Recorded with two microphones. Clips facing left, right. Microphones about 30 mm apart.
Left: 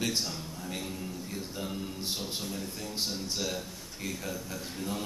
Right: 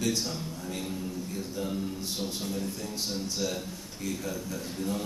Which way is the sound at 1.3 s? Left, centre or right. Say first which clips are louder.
Right 3 dB; centre.